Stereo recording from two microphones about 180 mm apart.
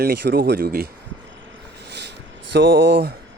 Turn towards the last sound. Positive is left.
turn(degrees=-70)  # may be behind; listen again after turning